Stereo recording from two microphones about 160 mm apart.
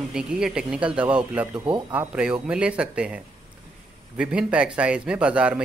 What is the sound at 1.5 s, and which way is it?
Speech, 30° right (ahead or behind).